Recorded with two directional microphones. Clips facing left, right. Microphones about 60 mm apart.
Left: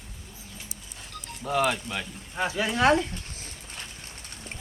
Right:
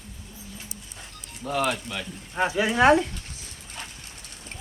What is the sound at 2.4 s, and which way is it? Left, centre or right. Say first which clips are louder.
Speech: right 4 dB; right.